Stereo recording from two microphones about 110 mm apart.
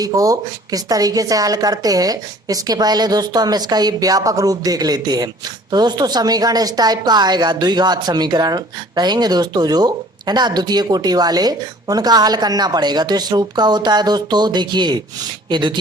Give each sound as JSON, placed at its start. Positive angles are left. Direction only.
{"t": 0.0, "sound": "a woman's voice", "side_deg": -35}